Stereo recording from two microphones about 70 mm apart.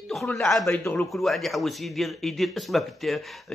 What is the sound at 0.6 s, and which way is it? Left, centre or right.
Speech, left.